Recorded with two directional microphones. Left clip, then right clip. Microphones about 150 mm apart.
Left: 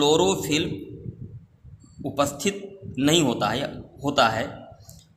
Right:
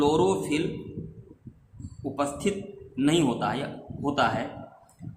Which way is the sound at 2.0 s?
55° left (ahead or behind).